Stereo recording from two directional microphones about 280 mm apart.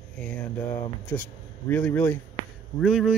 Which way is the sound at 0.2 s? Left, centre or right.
Centre.